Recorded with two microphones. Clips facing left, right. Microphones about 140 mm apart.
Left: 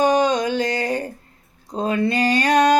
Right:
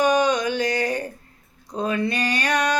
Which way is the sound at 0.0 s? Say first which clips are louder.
Left 2 dB; 25° left (ahead or behind).